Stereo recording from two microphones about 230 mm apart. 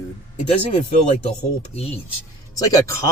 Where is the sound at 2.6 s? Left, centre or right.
Centre.